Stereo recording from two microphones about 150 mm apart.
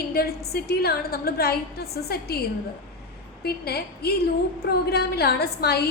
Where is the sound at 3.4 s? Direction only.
90° left.